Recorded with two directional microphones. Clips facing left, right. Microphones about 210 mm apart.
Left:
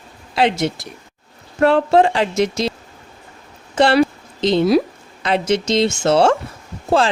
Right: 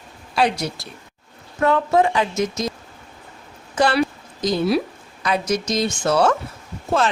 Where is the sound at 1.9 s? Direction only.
75° left (ahead or behind).